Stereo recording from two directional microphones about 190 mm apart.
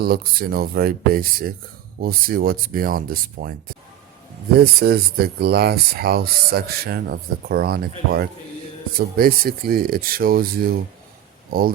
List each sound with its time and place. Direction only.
0.0 s speech: 55° right (ahead or behind)
4.6 s speech: 55° right (ahead or behind)